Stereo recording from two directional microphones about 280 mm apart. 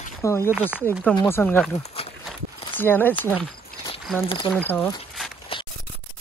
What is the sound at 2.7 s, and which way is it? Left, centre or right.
Speech, centre.